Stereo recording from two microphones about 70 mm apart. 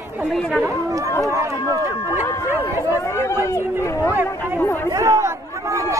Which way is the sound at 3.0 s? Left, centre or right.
Left.